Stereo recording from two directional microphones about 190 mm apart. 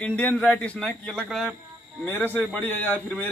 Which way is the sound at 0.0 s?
5° left (ahead or behind).